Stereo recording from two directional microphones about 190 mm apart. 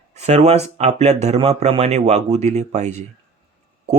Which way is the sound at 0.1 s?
35° right (ahead or behind).